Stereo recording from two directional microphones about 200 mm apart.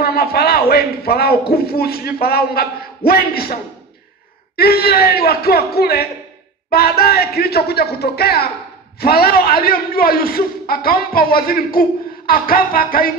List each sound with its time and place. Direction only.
0.0 s a man's voice: 50° left (ahead or behind)
4.6 s a man's voice: 50° left (ahead or behind)